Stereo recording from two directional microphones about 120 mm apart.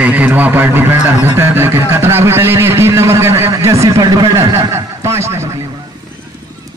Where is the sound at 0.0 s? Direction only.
15° right (ahead or behind).